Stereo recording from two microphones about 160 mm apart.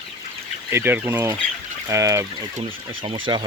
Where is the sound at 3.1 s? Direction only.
30° right (ahead or behind).